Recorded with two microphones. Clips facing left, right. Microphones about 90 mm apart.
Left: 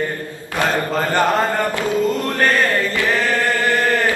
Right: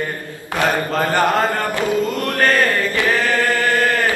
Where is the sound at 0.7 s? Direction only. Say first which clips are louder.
Right 1 dB; 10° right (ahead or behind).